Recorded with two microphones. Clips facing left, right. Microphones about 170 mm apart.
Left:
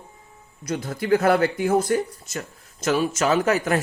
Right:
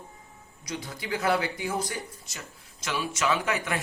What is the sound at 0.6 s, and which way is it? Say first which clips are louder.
Speech: left 9 dB; 50° left (ahead or behind).